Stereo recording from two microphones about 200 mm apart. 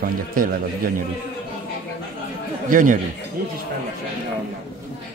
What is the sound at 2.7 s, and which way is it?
Speech, 40° right (ahead or behind).